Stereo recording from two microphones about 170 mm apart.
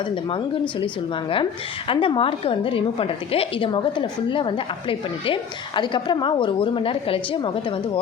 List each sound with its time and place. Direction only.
0.0 s a woman's voice: 30° left (ahead or behind)